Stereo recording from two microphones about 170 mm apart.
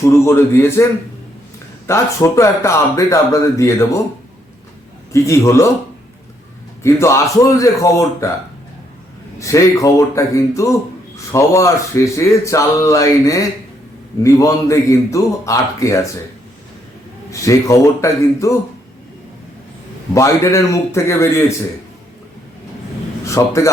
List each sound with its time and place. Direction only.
0.0 s speech: 15° left (ahead or behind)
1.9 s speech: 15° left (ahead or behind)
5.1 s speech: 15° left (ahead or behind)
6.8 s speech: 15° left (ahead or behind)
9.4 s a man's voice: 20° left (ahead or behind)
17.4 s speech: 20° left (ahead or behind)
20.1 s speech: 20° left (ahead or behind)
23.2 s a man's voice: 15° left (ahead or behind)